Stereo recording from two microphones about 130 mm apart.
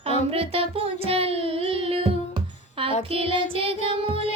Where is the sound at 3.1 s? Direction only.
45° right (ahead or behind).